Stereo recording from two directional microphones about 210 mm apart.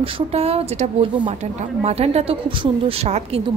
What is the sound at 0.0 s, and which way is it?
Speech, 30° right (ahead or behind).